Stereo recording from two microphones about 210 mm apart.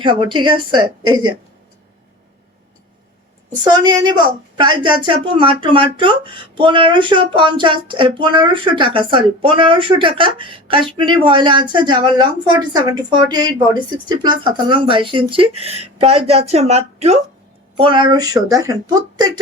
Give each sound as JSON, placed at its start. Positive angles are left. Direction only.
{"t": 0.0, "sound": "speech", "side_deg": -25}
{"t": 3.6, "sound": "speech", "side_deg": -20}